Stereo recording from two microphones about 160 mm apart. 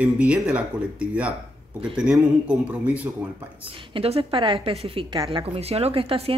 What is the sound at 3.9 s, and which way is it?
A woman's voice, 35° right (ahead or behind).